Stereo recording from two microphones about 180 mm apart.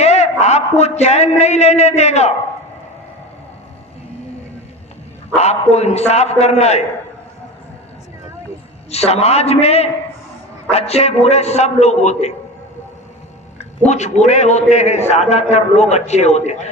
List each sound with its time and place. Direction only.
0.0 s a man's voice: 35° left (ahead or behind)
5.4 s a man's voice: 35° left (ahead or behind)
8.9 s a man's voice: 35° left (ahead or behind)
13.8 s a man's voice: 40° left (ahead or behind)